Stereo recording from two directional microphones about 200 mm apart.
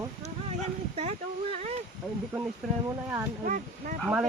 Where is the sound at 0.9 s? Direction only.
30° right (ahead or behind).